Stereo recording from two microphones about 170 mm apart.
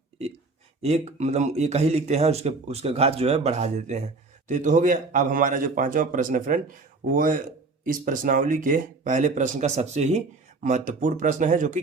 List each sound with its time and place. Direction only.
0.8 s speech: 40° right (ahead or behind)